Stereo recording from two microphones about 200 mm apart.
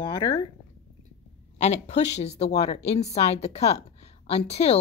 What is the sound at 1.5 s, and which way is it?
A woman's voice, 35° left (ahead or behind).